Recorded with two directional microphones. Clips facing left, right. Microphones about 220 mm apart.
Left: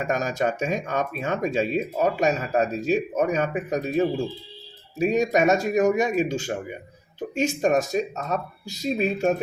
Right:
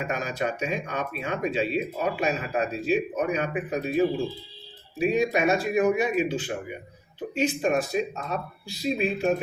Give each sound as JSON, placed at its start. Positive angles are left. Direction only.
{"t": 0.0, "sound": "speech", "side_deg": 40}
{"t": 4.9, "sound": "speech", "side_deg": 40}